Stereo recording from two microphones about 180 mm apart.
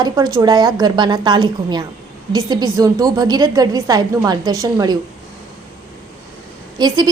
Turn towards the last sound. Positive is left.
turn(degrees=-20)  # may be behind; listen again after turning